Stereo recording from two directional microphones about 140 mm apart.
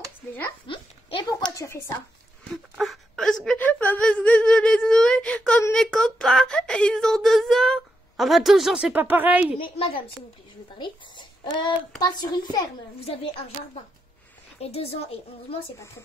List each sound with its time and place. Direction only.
0.7 s a sound: 35° left (ahead or behind)
1.5 s speech: 20° left (ahead or behind)
2.5 s speech: centre (ahead or behind)
3.6 s speech: 15° left (ahead or behind); by 9.6 s 10° right (ahead or behind)
9.6 s a child's voice: 40° left (ahead or behind)
14.6 s speech: 45° left (ahead or behind)